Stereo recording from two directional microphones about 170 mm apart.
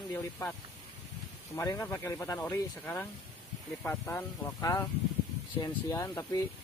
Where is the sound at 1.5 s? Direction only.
20° left (ahead or behind).